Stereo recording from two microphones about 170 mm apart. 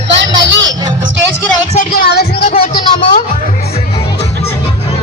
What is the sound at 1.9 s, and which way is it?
Music, 65° left (ahead or behind).